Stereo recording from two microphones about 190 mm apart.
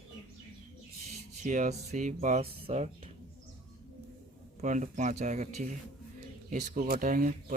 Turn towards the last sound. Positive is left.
turn(degrees=-45)  # may be behind; listen again after turning